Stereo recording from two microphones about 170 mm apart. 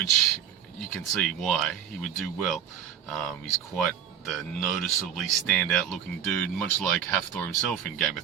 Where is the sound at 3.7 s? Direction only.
Centre (ahead or behind).